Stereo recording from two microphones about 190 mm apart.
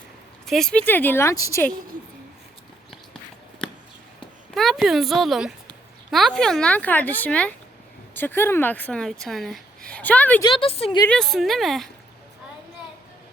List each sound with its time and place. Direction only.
0.4 s speech: centre (ahead or behind)
4.5 s speech: centre (ahead or behind)
10.4 s a woman's voice: 30° left (ahead or behind)
11.1 s speech: centre (ahead or behind)